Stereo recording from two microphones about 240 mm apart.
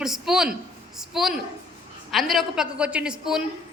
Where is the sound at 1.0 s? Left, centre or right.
Centre.